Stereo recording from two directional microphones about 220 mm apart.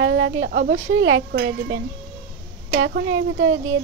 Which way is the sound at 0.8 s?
70° right (ahead or behind).